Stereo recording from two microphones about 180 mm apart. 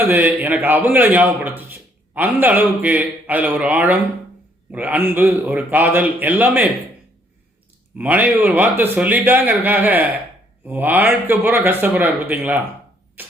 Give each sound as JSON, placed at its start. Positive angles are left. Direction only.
{"t": 0.0, "sound": "speech", "side_deg": -10}
{"t": 7.9, "sound": "speech", "side_deg": -10}
{"t": 13.2, "sound": "a sound", "side_deg": -10}